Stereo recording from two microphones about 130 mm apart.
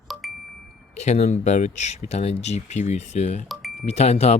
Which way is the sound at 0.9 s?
60° left (ahead or behind).